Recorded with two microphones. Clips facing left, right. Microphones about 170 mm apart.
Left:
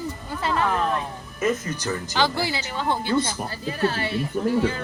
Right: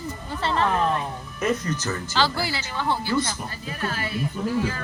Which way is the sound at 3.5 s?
30° left (ahead or behind).